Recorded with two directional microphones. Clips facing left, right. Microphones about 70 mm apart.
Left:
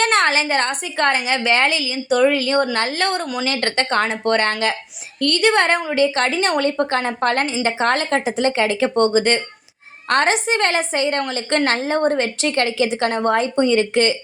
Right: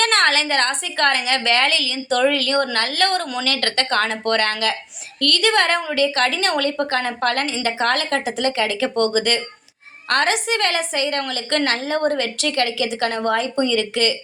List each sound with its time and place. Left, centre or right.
0.0 s a woman's voice: left